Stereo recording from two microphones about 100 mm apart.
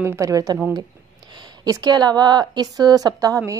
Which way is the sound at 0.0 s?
30° right (ahead or behind).